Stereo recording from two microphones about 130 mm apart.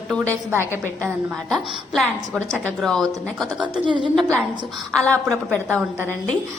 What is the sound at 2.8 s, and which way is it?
Speech, 5° left (ahead or behind).